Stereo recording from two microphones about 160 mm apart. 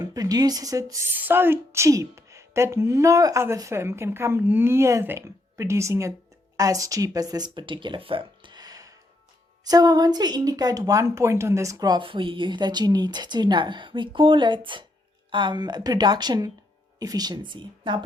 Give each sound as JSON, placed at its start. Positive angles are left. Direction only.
{"t": 0.0, "sound": "a woman's voice", "side_deg": -25}